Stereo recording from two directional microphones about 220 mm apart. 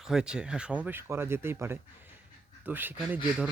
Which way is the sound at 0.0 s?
5° right (ahead or behind).